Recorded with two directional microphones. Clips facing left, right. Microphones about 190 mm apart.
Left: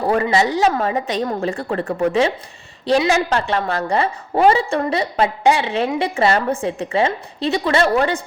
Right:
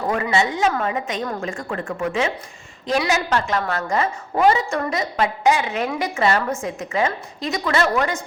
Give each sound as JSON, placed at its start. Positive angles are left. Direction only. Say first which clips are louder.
{"t": 0.0, "sound": "a woman's voice", "louder": "left 4 dB", "side_deg": 35}